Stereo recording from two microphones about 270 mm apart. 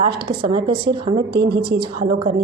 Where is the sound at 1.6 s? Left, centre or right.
Centre.